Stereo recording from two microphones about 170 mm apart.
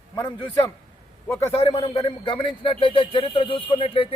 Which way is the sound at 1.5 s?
35° left (ahead or behind).